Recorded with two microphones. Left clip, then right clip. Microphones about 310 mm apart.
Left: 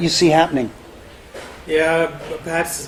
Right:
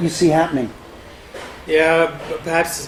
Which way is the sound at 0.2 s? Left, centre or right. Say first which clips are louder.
Left 1 dB; right.